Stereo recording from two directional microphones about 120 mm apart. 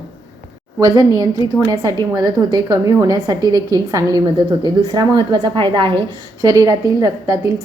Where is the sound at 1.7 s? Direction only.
30° right (ahead or behind).